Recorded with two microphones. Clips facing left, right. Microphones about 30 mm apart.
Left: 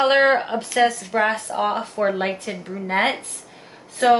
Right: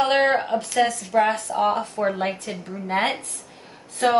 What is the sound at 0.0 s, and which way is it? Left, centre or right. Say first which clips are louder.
Speech: left 3 dB; centre.